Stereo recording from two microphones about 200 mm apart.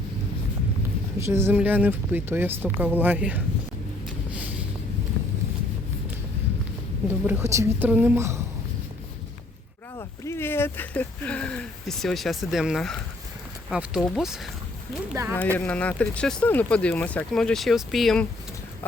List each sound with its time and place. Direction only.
1.2 s speech: 15° right (ahead or behind)
4.3 s a sound: 5° right (ahead or behind)
7.3 s speech: 10° right (ahead or behind)
9.9 s speech: 15° left (ahead or behind); by 14.5 s centre (ahead or behind)
15.1 s speech: 15° right (ahead or behind)
15.5 s speech: 5° left (ahead or behind)